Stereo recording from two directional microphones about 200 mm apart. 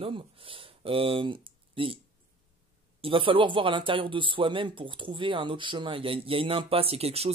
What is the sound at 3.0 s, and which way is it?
Speech, 25° right (ahead or behind).